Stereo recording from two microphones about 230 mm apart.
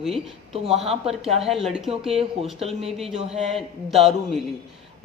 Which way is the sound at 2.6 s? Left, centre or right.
Right.